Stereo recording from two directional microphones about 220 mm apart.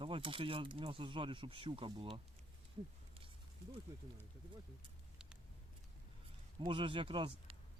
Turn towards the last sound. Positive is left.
turn(degrees=-25)  # may be behind; listen again after turning